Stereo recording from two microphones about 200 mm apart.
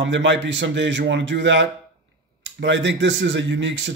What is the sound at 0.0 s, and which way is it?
Speech, 65° right (ahead or behind).